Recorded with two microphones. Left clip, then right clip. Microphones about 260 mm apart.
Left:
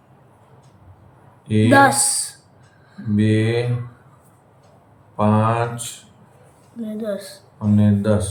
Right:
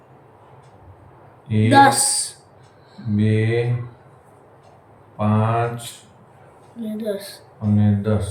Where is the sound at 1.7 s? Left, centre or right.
Centre.